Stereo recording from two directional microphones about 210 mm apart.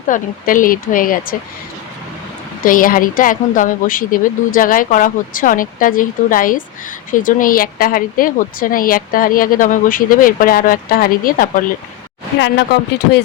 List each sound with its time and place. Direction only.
0.1 s speech: 40° left (ahead or behind)
2.6 s speech: 40° left (ahead or behind)
12.4 s speech: 60° left (ahead or behind)